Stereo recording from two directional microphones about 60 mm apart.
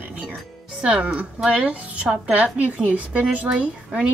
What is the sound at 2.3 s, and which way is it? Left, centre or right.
Speech, right.